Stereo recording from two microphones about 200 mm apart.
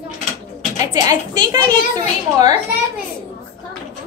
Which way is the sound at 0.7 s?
15° right (ahead or behind).